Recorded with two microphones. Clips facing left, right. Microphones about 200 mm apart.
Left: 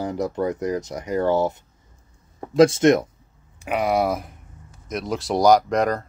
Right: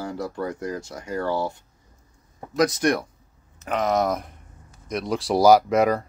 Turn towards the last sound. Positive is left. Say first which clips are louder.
# right 1 dB
turn(degrees=-5)  # may be behind; listen again after turning